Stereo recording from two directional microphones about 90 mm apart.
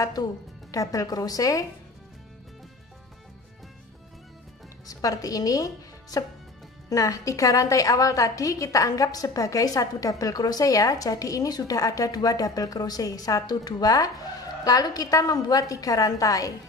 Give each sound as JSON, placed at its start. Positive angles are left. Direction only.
{"t": 0.2, "sound": "a woman's voice", "side_deg": 45}
{"t": 4.8, "sound": "a woman's voice", "side_deg": 40}